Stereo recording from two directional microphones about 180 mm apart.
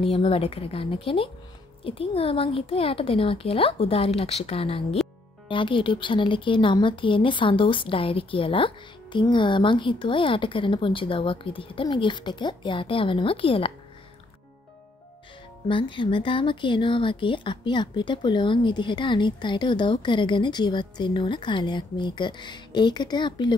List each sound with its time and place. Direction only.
0.0 s speech: 30° left (ahead or behind)
15.7 s speech: 25° left (ahead or behind)